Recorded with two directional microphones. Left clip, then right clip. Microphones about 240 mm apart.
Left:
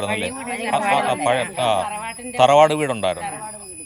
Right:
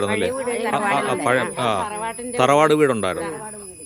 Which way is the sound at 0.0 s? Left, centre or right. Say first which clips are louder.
Right 3 dB; centre.